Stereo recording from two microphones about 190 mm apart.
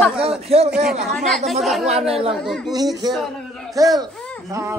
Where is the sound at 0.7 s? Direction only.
5° right (ahead or behind).